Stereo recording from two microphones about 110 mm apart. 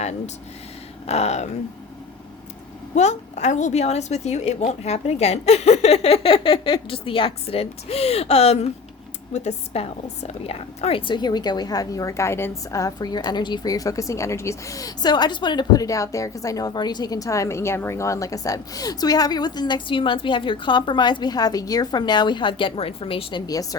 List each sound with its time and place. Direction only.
1.0 s a sound: 75° left (ahead or behind)
2.9 s a woman's voice: 90° left; by 8.7 s 75° left (ahead or behind)
9.3 s a woman's voice: 90° left; by 23.4 s 55° left (ahead or behind)